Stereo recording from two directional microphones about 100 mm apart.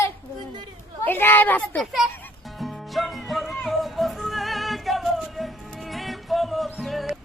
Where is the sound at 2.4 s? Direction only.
Centre (ahead or behind).